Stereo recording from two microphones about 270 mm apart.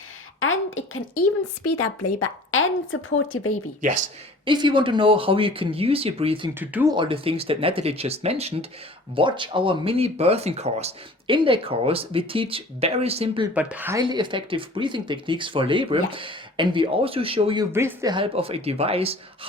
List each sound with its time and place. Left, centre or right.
0.3 s a woman's voice: left
1.6 s a woman's voice: left
3.8 s speech: right
4.4 s speech: centre
6.5 s speech: centre
13.5 s speech: centre; by 19.1 s right